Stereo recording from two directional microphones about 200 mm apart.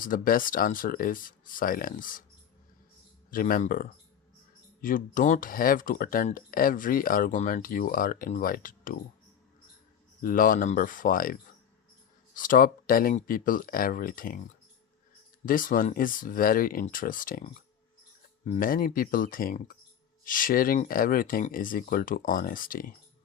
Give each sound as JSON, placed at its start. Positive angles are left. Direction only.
{"t": 0.0, "sound": "speech", "side_deg": 45}
{"t": 3.2, "sound": "speech", "side_deg": 45}
{"t": 10.2, "sound": "speech", "side_deg": 45}
{"t": 15.4, "sound": "speech", "side_deg": 45}